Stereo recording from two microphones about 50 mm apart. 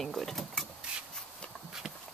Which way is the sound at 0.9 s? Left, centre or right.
Centre.